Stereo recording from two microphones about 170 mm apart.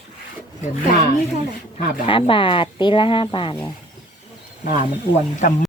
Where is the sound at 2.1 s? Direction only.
30° left (ahead or behind).